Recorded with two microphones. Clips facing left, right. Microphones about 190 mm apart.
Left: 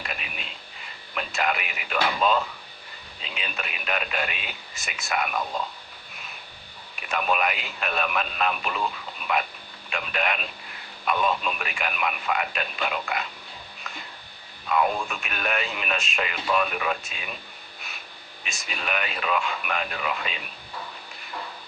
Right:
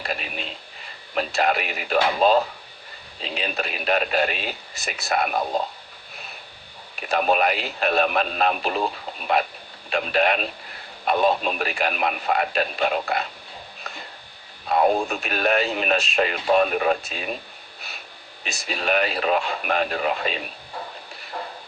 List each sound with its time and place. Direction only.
0.0 s radio: 35° right (ahead or behind)
1.1 s speech: 35° right (ahead or behind)
7.1 s speech: 35° right (ahead or behind)
13.9 s electric shaver: 35° right (ahead or behind)
14.7 s speech: 35° right (ahead or behind)
18.4 s speech: 35° right (ahead or behind)